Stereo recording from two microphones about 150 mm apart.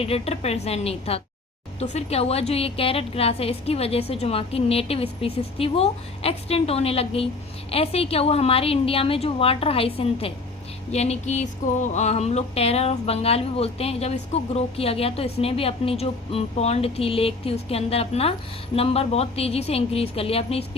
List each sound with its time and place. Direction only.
0.0 s a woman's voice: 40° left (ahead or behind)
10.9 s a sound: 45° left (ahead or behind)
18.8 s a woman's voice: 40° left (ahead or behind)